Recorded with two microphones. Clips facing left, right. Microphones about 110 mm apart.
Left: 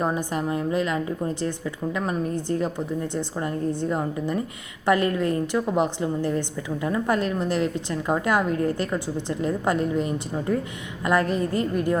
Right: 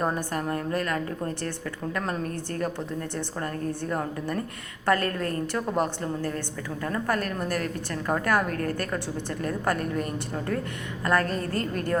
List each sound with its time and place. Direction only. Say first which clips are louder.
0.1 s speech: left 3 dB; 15° left (ahead or behind)